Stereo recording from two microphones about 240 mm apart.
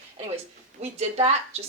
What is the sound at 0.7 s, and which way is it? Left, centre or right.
Speech, right.